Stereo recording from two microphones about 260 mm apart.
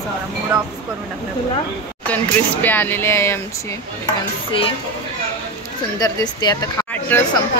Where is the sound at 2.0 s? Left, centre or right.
Centre.